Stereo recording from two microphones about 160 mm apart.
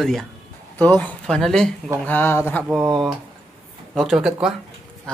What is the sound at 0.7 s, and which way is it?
Speech, 10° left (ahead or behind).